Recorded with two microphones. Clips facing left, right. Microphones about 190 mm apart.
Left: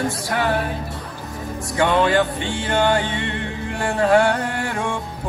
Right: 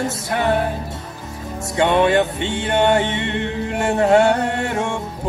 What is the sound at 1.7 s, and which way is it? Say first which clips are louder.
Music: right 2 dB; 25° right (ahead or behind).